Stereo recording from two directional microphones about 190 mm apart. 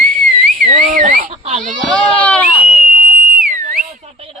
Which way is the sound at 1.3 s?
30° right (ahead or behind).